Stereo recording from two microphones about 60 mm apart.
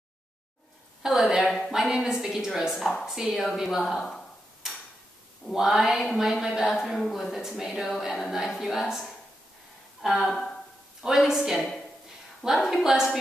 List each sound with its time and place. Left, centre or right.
1.0 s a woman's voice: centre
1.4 s a sound: centre
1.7 s a woman's voice: centre
2.8 s speech: centre
3.1 s a woman's voice: centre
5.5 s a woman's voice: centre
10.0 s a woman's voice: centre
11.0 s a woman's voice: centre
12.9 s a woman's voice: centre